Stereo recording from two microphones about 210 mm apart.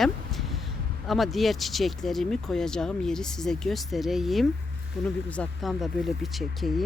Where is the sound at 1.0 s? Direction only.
Centre (ahead or behind).